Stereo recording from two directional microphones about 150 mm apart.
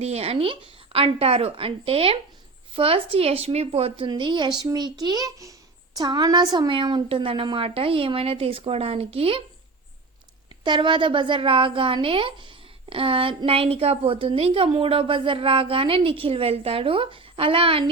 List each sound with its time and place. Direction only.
0.0 s a woman's voice: 45° right (ahead or behind)
10.6 s a woman's voice: 30° right (ahead or behind)